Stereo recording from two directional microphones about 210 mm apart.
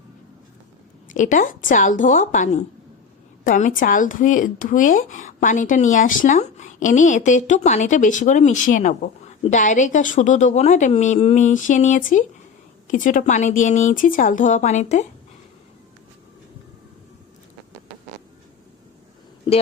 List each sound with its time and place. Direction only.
1.1 s speech: 35° left (ahead or behind)